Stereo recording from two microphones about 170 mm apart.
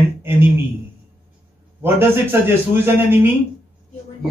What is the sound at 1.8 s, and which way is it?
Speech, 15° right (ahead or behind).